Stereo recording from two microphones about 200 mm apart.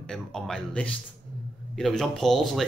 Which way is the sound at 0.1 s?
5° left (ahead or behind).